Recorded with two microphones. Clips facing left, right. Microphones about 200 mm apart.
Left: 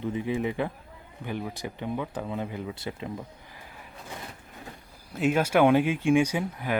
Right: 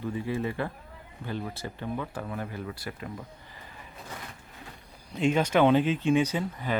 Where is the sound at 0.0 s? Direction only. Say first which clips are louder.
Left 2 dB; 20° left (ahead or behind).